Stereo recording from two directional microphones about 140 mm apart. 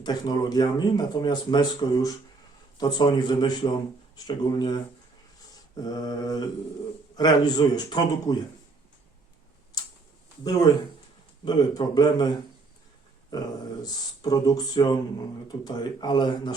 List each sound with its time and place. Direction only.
0.0 s a man's voice: 30° left (ahead or behind)
9.7 s tick-tock: 30° left (ahead or behind)
11.4 s speech: 30° left (ahead or behind)
13.8 s a man's voice: 25° left (ahead or behind)